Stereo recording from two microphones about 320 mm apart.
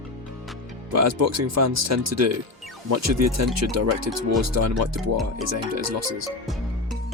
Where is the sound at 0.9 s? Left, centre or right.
Right.